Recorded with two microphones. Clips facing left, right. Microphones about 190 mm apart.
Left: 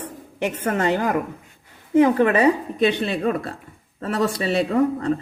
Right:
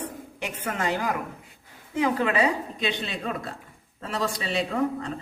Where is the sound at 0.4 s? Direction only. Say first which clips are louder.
Left 8 dB; 55° left (ahead or behind).